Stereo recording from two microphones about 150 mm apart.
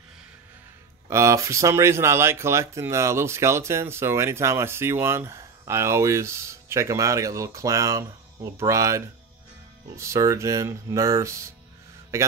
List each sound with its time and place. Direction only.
1.1 s speech: 20° right (ahead or behind)